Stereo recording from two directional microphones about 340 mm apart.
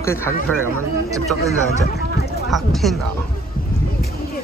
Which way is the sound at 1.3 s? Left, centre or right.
Right.